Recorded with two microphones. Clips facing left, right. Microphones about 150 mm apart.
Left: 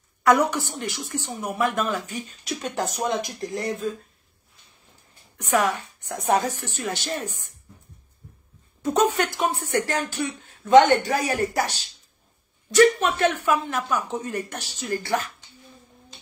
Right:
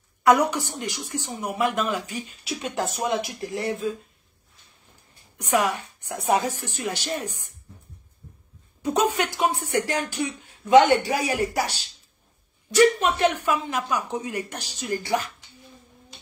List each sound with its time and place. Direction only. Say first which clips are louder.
0.2 s a woman's voice: even; 15° right (ahead or behind)
5.4 s a woman's voice: left 1 dB; 10° right (ahead or behind)
8.8 s a woman's voice: left 2 dB; 10° right (ahead or behind)